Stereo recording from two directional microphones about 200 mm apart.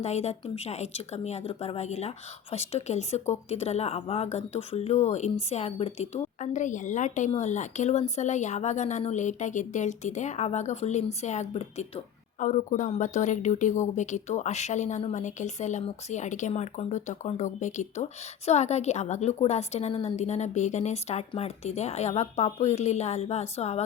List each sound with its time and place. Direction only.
0.0 s speech: 35° left (ahead or behind)